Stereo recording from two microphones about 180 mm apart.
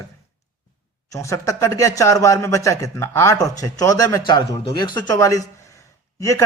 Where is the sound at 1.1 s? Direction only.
15° left (ahead or behind).